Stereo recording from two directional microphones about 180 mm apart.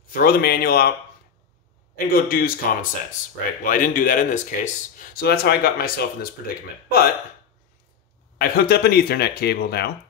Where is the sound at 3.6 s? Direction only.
50° left (ahead or behind).